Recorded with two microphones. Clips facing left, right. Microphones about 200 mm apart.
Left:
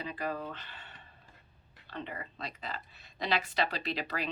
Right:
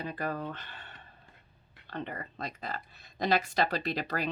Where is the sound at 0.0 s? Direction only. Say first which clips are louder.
Right 2 dB; 45° right (ahead or behind).